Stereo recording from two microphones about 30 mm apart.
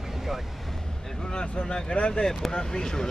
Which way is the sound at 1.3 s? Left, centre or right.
Left.